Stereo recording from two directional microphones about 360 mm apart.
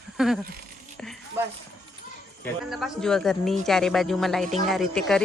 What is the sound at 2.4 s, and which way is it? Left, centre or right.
Speech, centre.